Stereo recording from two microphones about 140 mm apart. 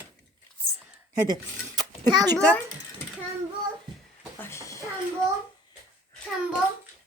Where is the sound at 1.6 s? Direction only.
30° right (ahead or behind).